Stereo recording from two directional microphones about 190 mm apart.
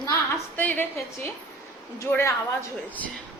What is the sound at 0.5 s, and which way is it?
A woman's voice, 10° left (ahead or behind).